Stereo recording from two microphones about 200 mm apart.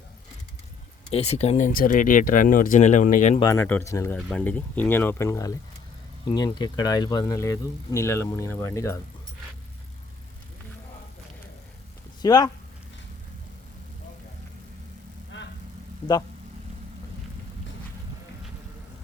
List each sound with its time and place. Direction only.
1.1 s speech: 30° left (ahead or behind)
3.4 s speech: 15° left (ahead or behind)
12.2 s speech: 20° left (ahead or behind)
15.3 s vehicle: 65° left (ahead or behind)